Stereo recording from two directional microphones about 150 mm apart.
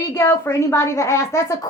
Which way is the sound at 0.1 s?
15° left (ahead or behind).